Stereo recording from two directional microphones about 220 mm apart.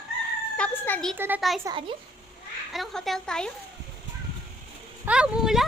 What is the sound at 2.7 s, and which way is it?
Speech, centre (ahead or behind).